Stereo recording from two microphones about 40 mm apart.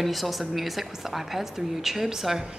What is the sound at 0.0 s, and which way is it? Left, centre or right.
A woman's voice, centre.